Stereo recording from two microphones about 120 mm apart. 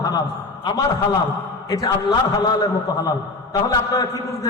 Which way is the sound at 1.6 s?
30° left (ahead or behind).